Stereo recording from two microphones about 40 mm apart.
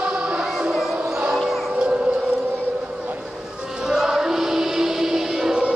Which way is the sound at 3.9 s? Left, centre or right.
Centre.